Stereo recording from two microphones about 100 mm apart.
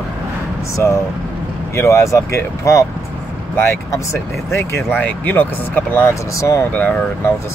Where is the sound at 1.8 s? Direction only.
30° left (ahead or behind).